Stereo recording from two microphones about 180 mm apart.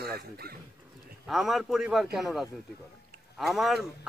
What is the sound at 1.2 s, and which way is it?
A man's voice, centre (ahead or behind).